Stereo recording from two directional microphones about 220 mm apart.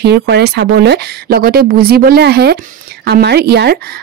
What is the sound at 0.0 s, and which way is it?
Speech, 50° right (ahead or behind).